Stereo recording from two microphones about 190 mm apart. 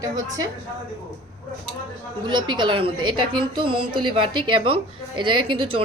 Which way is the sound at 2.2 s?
25° right (ahead or behind).